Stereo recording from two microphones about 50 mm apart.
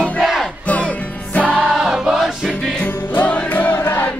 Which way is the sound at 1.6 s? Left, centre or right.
Centre.